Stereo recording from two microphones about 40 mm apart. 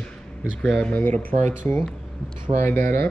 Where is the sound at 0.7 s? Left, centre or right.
Left.